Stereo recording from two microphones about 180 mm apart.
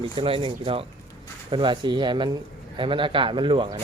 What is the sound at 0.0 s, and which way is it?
Speech, 30° right (ahead or behind).